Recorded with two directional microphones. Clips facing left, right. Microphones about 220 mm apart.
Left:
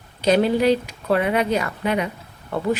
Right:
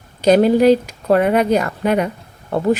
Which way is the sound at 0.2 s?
45° right (ahead or behind).